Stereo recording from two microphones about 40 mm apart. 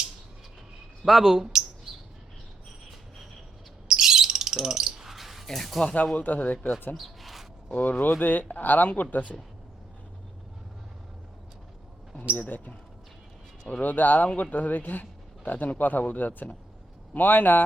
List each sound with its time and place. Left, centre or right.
1.0 s bird: centre
3.8 s bird: centre
5.1 s a sound: centre
5.5 s speech: centre
5.8 s speech: left
6.9 s a sound: centre
7.7 s speech: left
12.4 s speech: left
13.8 s speech: left